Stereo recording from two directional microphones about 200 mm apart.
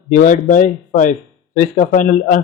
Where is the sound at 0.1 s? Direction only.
40° left (ahead or behind).